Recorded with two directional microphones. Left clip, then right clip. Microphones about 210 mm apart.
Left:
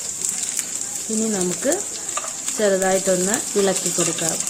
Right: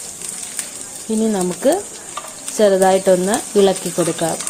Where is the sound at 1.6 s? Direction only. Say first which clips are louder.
Right 6 dB; 20° right (ahead or behind).